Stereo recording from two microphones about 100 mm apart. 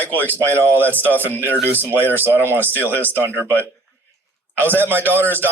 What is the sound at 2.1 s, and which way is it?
Speech, 20° right (ahead or behind).